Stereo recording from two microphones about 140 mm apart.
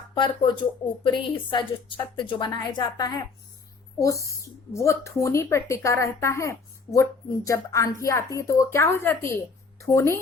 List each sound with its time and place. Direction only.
0.1 s a woman's voice: 35° left (ahead or behind)